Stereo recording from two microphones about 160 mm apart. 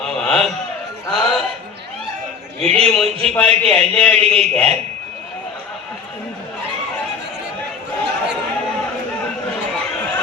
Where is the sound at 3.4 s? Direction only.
5° left (ahead or behind).